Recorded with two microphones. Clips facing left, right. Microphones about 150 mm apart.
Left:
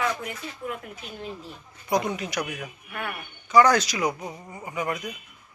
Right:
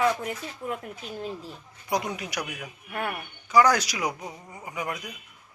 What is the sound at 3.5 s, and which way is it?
Speech, 10° right (ahead or behind).